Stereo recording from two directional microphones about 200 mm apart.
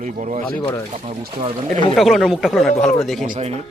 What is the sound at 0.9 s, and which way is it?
Speech, 35° right (ahead or behind).